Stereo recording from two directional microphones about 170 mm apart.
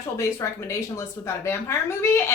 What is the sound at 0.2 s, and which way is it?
A woman's voice, 15° left (ahead or behind).